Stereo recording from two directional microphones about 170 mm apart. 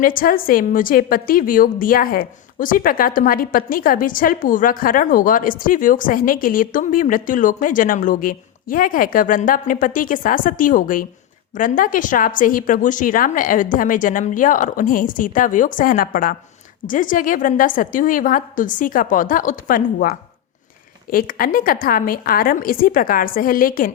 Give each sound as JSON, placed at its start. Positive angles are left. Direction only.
{"t": 0.0, "sound": "a woman's voice", "side_deg": 55}